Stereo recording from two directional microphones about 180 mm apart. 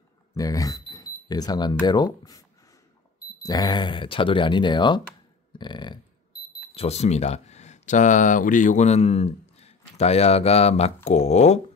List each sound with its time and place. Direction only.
0.3 s speech: 20° left (ahead or behind)
3.4 s speech: 20° left (ahead or behind)
6.7 s speech: 35° left (ahead or behind)